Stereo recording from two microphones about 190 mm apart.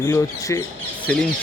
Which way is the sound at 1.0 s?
5° left (ahead or behind).